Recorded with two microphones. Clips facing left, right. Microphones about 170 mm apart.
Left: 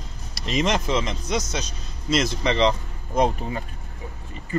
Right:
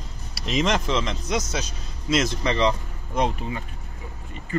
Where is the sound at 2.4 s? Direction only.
25° left (ahead or behind).